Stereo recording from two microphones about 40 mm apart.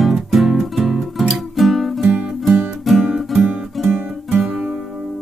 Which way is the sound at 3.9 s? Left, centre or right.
Right.